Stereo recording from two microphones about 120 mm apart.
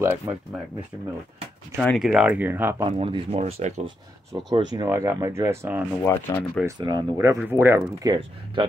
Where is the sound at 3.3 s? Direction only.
65° right (ahead or behind).